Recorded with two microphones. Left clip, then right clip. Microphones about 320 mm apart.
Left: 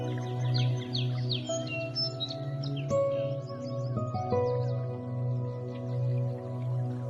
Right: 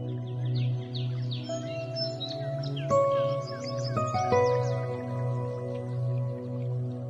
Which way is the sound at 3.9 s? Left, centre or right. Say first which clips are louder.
Right 6 dB; right.